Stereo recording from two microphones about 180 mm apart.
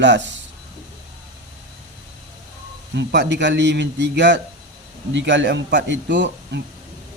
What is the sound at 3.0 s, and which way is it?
A man's voice, 75° right (ahead or behind).